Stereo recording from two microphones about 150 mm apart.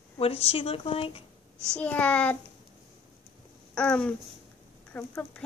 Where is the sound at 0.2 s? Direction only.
40° left (ahead or behind).